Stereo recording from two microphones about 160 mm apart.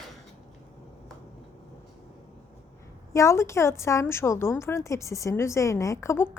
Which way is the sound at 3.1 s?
20° left (ahead or behind).